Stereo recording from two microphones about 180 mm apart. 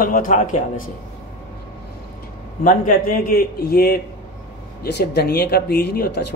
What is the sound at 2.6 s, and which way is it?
A man's voice, 50° left (ahead or behind).